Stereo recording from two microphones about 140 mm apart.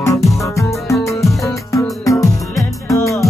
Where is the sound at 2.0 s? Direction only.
25° left (ahead or behind).